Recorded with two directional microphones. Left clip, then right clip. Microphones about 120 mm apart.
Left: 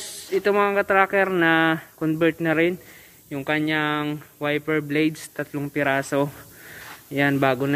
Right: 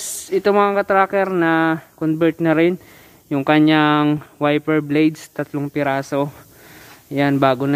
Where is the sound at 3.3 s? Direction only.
55° right (ahead or behind); by 6.0 s 30° right (ahead or behind).